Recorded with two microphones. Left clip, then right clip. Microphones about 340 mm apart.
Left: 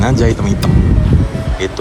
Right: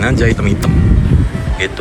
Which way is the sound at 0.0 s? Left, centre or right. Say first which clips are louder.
Even; centre.